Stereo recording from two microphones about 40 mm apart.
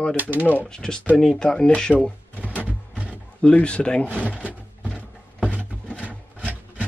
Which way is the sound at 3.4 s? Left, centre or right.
Left.